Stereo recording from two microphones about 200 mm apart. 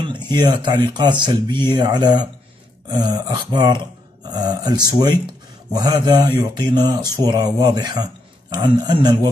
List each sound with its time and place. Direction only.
0.0 s speech: 20° right (ahead or behind)